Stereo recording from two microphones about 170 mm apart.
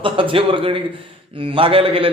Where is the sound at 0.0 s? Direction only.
30° right (ahead or behind).